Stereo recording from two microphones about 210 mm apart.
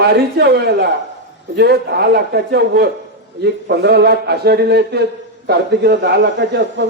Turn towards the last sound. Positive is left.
turn(degrees=-55)  # may be behind; listen again after turning